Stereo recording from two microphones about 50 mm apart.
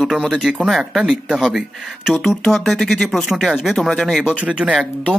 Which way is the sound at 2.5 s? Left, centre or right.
Centre.